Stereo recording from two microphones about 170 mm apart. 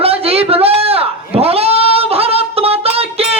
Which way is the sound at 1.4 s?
35° right (ahead or behind).